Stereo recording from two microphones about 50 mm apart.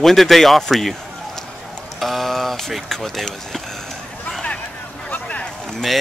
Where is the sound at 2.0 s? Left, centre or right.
Centre.